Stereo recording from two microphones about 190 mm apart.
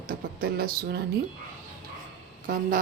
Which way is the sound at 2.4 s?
45° right (ahead or behind).